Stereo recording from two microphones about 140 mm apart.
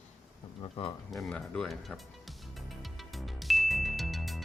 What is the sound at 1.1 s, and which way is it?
Speech, 5° left (ahead or behind).